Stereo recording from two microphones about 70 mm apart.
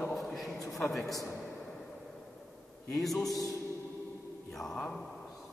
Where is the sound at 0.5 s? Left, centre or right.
Left.